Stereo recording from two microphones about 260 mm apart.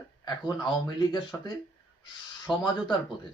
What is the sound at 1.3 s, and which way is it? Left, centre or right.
Speech, centre.